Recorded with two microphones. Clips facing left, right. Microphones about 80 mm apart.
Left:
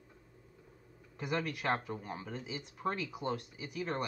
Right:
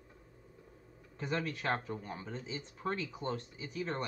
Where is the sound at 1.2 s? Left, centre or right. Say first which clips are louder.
Left 1 dB; centre.